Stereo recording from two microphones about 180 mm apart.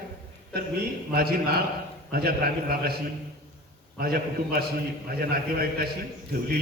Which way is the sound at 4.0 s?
55° right (ahead or behind).